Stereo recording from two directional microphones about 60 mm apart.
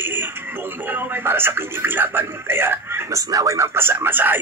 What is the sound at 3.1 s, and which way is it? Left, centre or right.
Speech, right.